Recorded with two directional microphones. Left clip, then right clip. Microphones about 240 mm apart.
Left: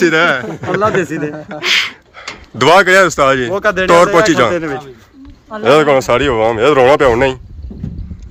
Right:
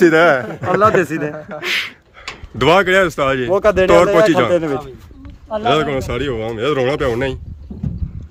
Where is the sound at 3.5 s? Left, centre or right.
Right.